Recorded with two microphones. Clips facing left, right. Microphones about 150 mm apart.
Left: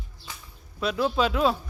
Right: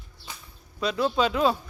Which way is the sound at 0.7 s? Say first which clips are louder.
Even; centre (ahead or behind).